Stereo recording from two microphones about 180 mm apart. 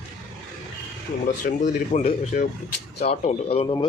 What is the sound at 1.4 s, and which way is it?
Speech, 45° left (ahead or behind).